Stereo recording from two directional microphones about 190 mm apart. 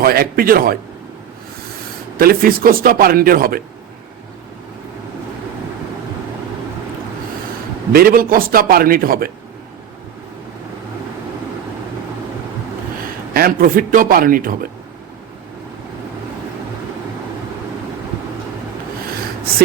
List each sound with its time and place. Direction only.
0.0 s a man's voice: 50° right (ahead or behind)
2.1 s a man's voice: 50° right (ahead or behind)
7.9 s a man's voice: 50° right (ahead or behind)
13.3 s a man's voice: 50° right (ahead or behind)